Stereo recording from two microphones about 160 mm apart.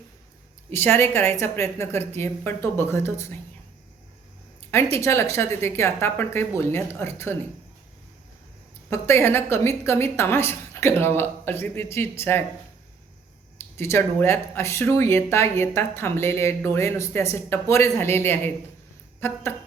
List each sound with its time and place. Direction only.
0.7 s speech: 15° left (ahead or behind)
4.7 s speech: 15° left (ahead or behind)
8.9 s speech: 15° left (ahead or behind)
13.6 s speech: 15° left (ahead or behind)